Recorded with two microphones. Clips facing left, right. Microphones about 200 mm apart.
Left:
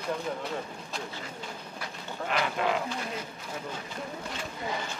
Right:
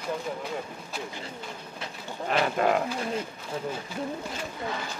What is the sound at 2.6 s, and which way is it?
Speech, 45° right (ahead or behind).